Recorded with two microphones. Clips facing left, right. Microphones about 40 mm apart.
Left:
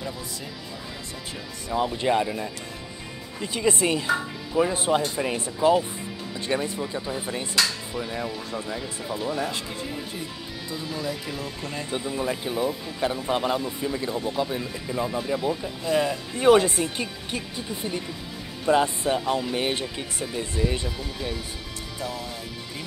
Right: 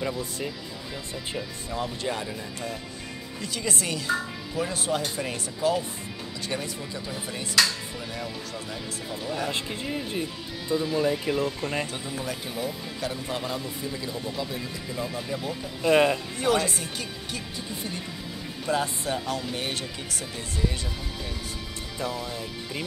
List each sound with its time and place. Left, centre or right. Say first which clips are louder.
1.7 s speech: left 8 dB; left
9.5 s speech: right 2 dB; right
11.9 s speech: left 5 dB; left
15.8 s speech: right 4 dB; right
16.3 s speech: left 12 dB; left
18.7 s speech: left 6 dB; left